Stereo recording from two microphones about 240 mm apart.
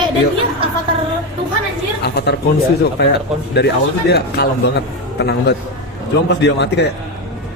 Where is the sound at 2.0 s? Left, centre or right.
Left.